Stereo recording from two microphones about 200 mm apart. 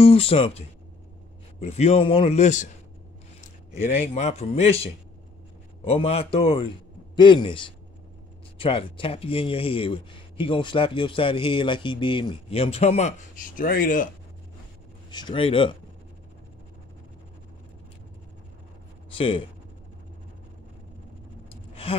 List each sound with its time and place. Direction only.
0.0 s a man's voice: 30° left (ahead or behind)
5.9 s speech: 30° left (ahead or behind)
15.0 s speech: 20° left (ahead or behind)
19.1 s speech: 25° left (ahead or behind)
21.8 s speech: 30° left (ahead or behind)